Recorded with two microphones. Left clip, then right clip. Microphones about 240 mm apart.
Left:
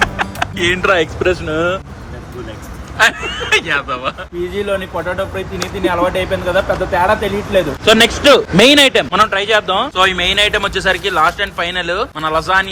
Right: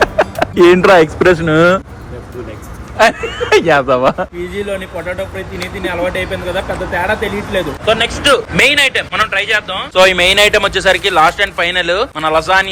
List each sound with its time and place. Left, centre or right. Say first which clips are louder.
0.0 s music: right 4 dB; centre
1.2 s speech: right 6 dB; right
3.0 s speech: right 2 dB; centre
4.5 s a man's voice: left 3 dB; centre
9.9 s speech: right 8 dB; centre